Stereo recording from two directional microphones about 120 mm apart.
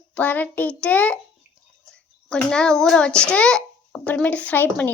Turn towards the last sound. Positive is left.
turn(degrees=15)  # may be behind; listen again after turning